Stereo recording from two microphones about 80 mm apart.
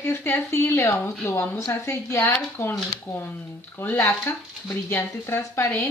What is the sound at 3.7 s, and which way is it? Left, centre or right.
A woman's voice, left.